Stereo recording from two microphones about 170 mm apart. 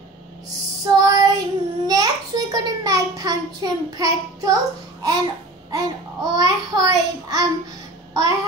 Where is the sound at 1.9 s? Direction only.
20° right (ahead or behind).